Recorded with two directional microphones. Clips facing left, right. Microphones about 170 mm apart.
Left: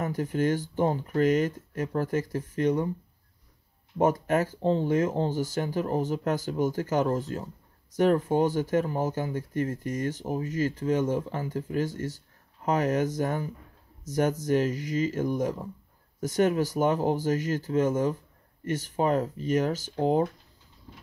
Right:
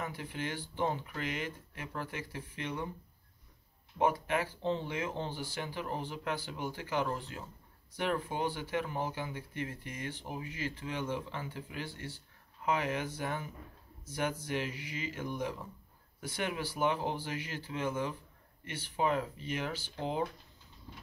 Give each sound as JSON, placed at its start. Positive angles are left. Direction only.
{"t": 0.0, "sound": "speech", "side_deg": 45}
{"t": 4.0, "sound": "speech", "side_deg": 45}